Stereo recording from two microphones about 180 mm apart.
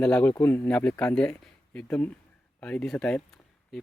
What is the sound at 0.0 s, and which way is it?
Speech, 5° left (ahead or behind).